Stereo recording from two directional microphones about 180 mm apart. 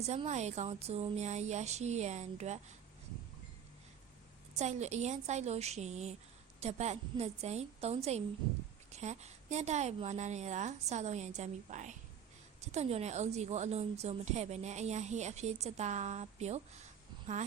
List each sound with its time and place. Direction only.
0.0 s a woman's voice: 35° right (ahead or behind)
4.5 s a woman's voice: 40° right (ahead or behind)